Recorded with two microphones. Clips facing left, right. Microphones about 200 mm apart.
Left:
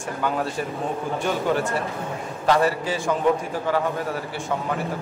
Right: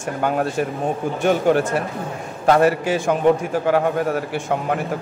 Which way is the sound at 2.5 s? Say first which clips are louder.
Right 5 dB; 60° right (ahead or behind).